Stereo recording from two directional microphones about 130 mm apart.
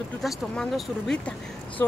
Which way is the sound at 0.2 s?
Centre (ahead or behind).